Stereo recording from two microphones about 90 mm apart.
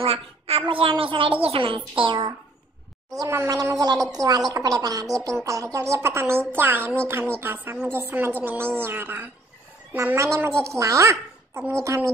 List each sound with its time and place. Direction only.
0.0 s a woman's voice: 90° right
2.0 s speech: 55° right (ahead or behind)
3.1 s a woman's voice: 35° right (ahead or behind)
10.1 s speech: 35° right (ahead or behind)